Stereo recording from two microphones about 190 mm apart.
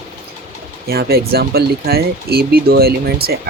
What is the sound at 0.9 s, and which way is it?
Speech, 55° right (ahead or behind).